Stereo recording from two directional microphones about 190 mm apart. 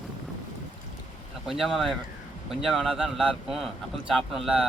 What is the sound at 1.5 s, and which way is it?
A man's voice, centre (ahead or behind).